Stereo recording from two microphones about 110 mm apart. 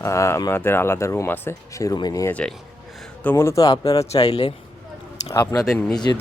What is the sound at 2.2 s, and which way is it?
Speech, 10° left (ahead or behind).